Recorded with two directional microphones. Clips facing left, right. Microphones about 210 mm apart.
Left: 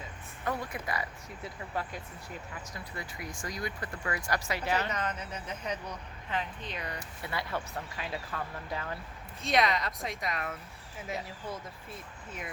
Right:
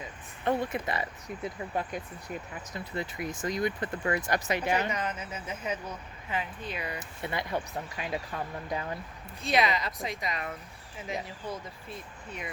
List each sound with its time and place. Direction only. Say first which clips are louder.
0.4 s speech: right 6 dB; 25° right (ahead or behind); by 7.0 s 10° right (ahead or behind)
7.2 s speech: right 4 dB; 20° right (ahead or behind)
9.4 s speech: right 1 dB; centre (ahead or behind)